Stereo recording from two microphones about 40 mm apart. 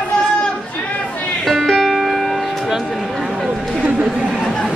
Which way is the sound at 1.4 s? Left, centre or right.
Centre.